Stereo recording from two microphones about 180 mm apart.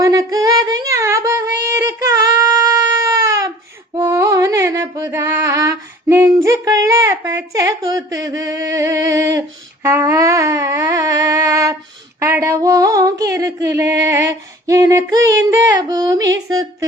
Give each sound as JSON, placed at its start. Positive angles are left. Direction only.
{"t": 0.0, "sound": "female singing", "side_deg": -15}
{"t": 3.9, "sound": "music", "side_deg": -15}
{"t": 9.8, "sound": "a sound", "side_deg": -15}